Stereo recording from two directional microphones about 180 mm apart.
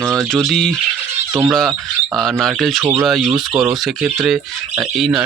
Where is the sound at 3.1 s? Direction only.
Centre (ahead or behind).